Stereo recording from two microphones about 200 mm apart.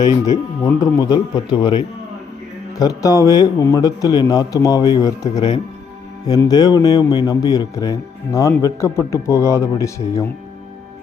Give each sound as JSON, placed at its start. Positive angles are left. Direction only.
{"t": 0.3, "sound": "speech", "side_deg": 20}